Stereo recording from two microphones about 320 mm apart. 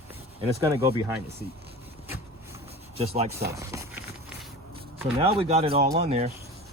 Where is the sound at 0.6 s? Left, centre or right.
Centre.